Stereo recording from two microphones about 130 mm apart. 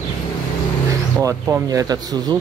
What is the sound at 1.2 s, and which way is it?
Speech, 25° right (ahead or behind).